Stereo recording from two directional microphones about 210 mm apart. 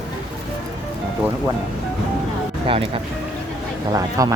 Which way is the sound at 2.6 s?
25° right (ahead or behind).